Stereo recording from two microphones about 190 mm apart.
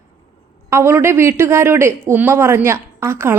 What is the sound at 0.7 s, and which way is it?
Speech, 15° right (ahead or behind).